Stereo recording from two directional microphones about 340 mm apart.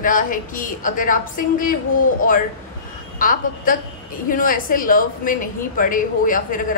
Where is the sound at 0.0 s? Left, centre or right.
Left.